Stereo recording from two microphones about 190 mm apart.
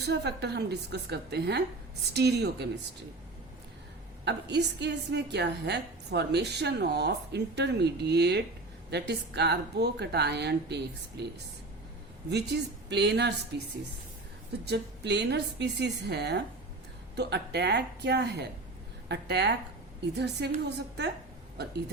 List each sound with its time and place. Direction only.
0.0 s a woman's voice: 60° right (ahead or behind)
4.3 s a woman's voice: 65° right (ahead or behind)
12.3 s a woman's voice: 60° right (ahead or behind)